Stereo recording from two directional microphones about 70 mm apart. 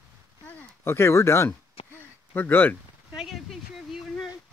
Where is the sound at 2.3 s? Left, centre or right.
Left.